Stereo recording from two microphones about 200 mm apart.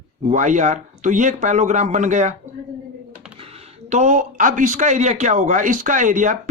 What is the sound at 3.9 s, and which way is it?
A man's voice, 35° right (ahead or behind).